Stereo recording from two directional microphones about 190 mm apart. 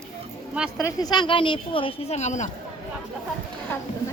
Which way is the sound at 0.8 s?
20° left (ahead or behind).